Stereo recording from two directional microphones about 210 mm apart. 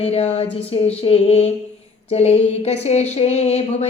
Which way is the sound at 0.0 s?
30° left (ahead or behind).